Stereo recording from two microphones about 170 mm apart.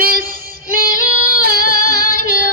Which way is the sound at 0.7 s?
60° right (ahead or behind).